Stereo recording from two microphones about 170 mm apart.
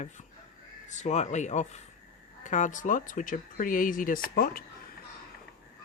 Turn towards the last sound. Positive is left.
turn(degrees=60)  # may be behind; listen again after turning